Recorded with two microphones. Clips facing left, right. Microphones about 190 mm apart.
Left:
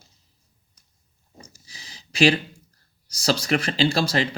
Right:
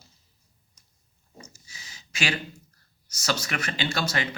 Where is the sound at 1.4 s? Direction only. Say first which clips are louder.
Left 1 dB; 35° left (ahead or behind).